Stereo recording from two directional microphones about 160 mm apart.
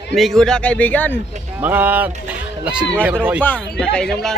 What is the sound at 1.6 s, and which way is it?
Speech, 10° right (ahead or behind).